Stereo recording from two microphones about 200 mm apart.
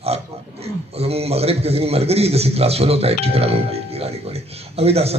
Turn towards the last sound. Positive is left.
turn(degrees=-30)  # may be behind; listen again after turning